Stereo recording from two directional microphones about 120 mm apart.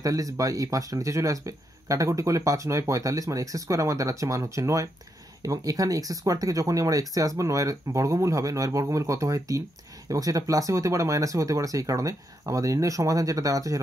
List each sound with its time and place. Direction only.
0.0 s speech: 30° right (ahead or behind)